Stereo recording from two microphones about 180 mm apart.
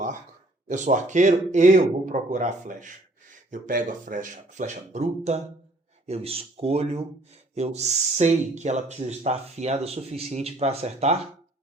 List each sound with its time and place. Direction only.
0.7 s speech: 45° right (ahead or behind)